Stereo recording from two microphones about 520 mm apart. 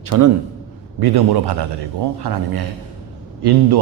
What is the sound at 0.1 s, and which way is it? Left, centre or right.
A man's voice, right.